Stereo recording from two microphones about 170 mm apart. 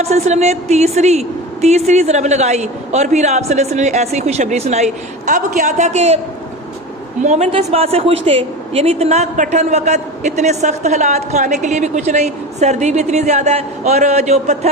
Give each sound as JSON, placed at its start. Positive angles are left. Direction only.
{"t": 0.0, "sound": "a woman's voice", "side_deg": -40}
{"t": 7.2, "sound": "a woman's voice", "side_deg": -45}